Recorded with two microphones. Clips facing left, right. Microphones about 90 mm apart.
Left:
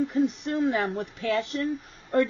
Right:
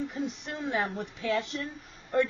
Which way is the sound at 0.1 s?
50° left (ahead or behind).